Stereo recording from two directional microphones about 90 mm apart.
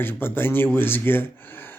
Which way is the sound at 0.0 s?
25° left (ahead or behind).